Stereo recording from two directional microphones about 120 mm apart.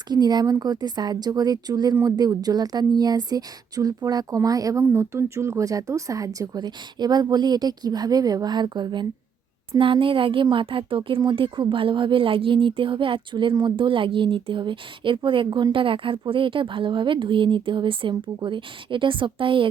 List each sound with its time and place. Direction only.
0.1 s a woman's voice: 35° right (ahead or behind)